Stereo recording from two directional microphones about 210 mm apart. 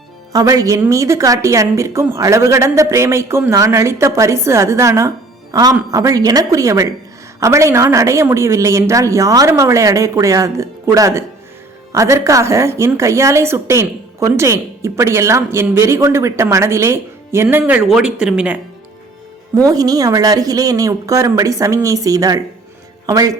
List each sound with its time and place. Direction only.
0.3 s a woman's voice: 15° right (ahead or behind)
19.6 s a woman's voice: 20° right (ahead or behind)